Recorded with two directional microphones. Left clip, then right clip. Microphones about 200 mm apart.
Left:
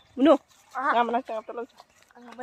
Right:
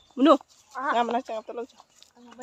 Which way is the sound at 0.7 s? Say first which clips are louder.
Left 2 dB; 25° right (ahead or behind).